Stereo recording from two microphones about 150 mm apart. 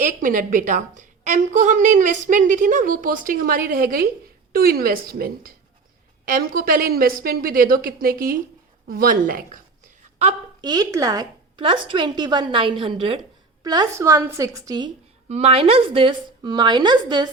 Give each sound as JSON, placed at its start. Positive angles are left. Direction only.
{"t": 0.0, "sound": "a woman's voice", "side_deg": -60}
{"t": 10.6, "sound": "a woman's voice", "side_deg": -25}
{"t": 13.7, "sound": "a woman's voice", "side_deg": -25}
{"t": 15.3, "sound": "a woman's voice", "side_deg": -40}